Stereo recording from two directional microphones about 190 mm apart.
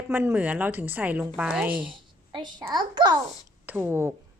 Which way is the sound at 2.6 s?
20° right (ahead or behind).